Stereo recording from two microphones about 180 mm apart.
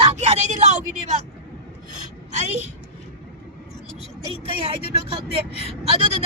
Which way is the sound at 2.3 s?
40° right (ahead or behind).